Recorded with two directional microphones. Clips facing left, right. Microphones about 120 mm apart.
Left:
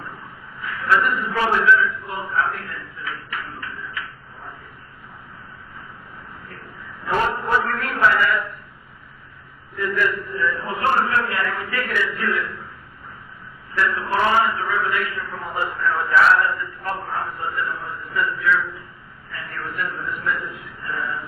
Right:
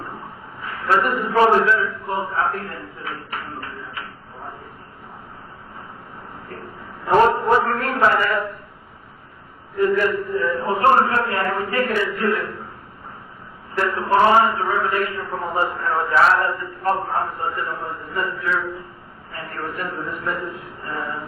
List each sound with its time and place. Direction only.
0.6 s a sound: 35° right (ahead or behind)
1.4 s a man's voice: 40° right (ahead or behind)
7.1 s a man's voice: 35° right (ahead or behind)
9.7 s a man's voice: 35° right (ahead or behind)
13.7 s a man's voice: 40° right (ahead or behind)